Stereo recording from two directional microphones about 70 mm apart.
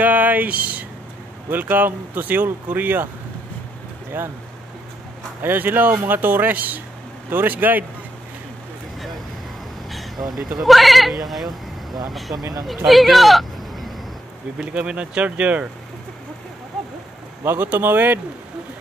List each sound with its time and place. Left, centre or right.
0.0 s a sound: right
1.5 s speech: right
4.1 s speech: right
5.4 s speech: right
9.8 s vehicle: centre
10.6 s speech: centre
11.4 s vehicle: right
12.1 s speech: centre
12.4 s speech: right
12.6 s speech: centre
14.6 s speech: centre
17.4 s speech: right